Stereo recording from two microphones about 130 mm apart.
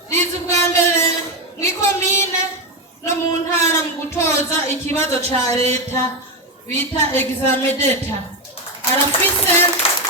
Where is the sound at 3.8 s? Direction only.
20° left (ahead or behind).